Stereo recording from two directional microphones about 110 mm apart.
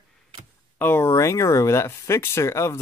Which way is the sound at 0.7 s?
20° left (ahead or behind).